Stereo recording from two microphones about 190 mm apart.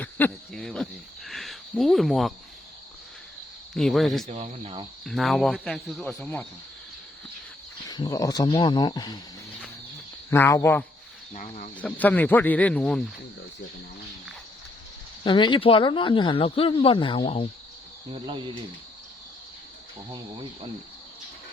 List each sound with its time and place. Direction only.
0.0 s speech: 5° left (ahead or behind)
3.8 s speech: centre (ahead or behind)
4.3 s speech: 35° right (ahead or behind)
5.0 s speech: centre (ahead or behind)
7.9 s speech: 20° left (ahead or behind)
10.2 s speech: 15° left (ahead or behind)
11.3 s speech: 40° left (ahead or behind)
11.8 s speech: 10° left (ahead or behind)
15.2 s speech: 25° left (ahead or behind)
20.1 s speech: 25° right (ahead or behind)